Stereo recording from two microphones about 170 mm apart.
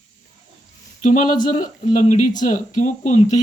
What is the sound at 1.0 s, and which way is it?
Speech, 50° left (ahead or behind).